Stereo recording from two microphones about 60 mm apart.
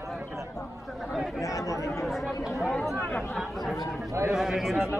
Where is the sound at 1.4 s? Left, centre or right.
Left.